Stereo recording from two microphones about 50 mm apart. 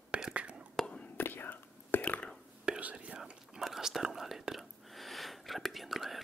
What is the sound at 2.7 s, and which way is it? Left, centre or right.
Whispering, right.